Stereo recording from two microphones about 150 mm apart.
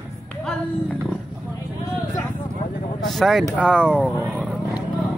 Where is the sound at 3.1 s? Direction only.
Centre (ahead or behind).